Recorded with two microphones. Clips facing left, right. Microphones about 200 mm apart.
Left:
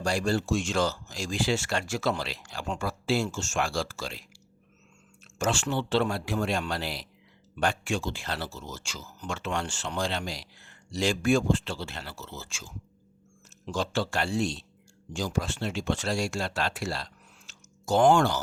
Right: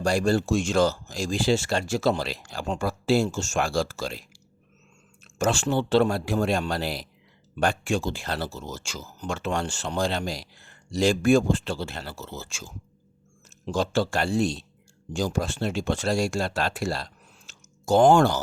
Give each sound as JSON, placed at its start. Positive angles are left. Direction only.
{"t": 0.0, "sound": "speech", "side_deg": -45}
{"t": 5.4, "sound": "speech", "side_deg": -40}